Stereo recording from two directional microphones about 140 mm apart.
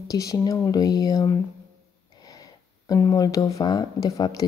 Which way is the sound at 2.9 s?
25° left (ahead or behind).